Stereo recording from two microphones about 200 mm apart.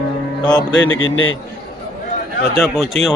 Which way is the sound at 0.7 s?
75° left (ahead or behind).